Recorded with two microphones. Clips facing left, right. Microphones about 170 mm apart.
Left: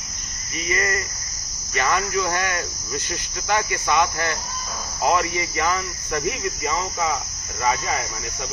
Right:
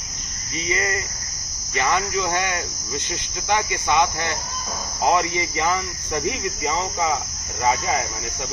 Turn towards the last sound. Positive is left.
turn(degrees=-20)  # may be behind; listen again after turning